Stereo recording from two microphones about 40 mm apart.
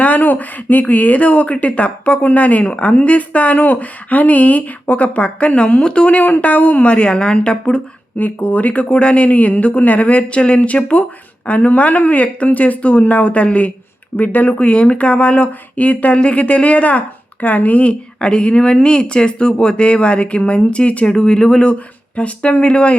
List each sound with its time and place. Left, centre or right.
0.0 s speech: left
8.2 s speech: left
14.2 s speech: left
14.7 s speech: left
18.2 s speech: left